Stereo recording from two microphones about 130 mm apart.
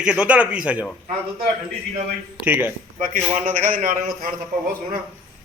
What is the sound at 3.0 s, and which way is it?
A man's voice, 85° right.